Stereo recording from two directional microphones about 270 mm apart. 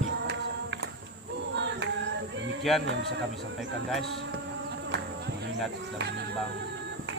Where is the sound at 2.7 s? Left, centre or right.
Centre.